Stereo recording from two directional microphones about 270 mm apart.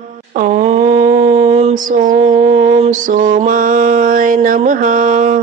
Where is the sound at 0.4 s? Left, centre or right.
Right.